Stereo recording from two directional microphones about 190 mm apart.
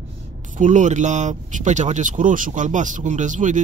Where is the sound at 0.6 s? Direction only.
40° right (ahead or behind).